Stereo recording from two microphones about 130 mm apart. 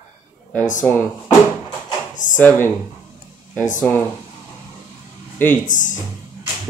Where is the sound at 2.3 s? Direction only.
15° left (ahead or behind).